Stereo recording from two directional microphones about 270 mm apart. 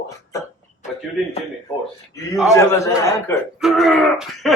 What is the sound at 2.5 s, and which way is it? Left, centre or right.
Speech, centre.